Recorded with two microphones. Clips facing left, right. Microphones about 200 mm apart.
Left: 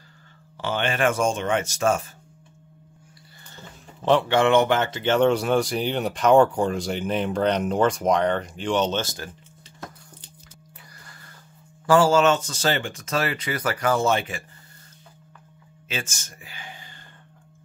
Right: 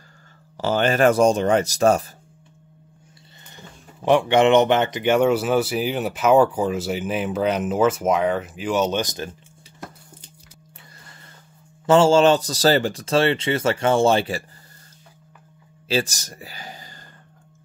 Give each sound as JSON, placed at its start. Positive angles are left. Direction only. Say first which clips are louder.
{"t": 0.6, "sound": "speech", "louder": "right 6 dB", "side_deg": -40}
{"t": 3.4, "sound": "speech", "louder": "even", "side_deg": -15}
{"t": 11.8, "sound": "speech", "louder": "right 3 dB", "side_deg": -25}
{"t": 15.9, "sound": "speech", "louder": "right 10 dB", "side_deg": -35}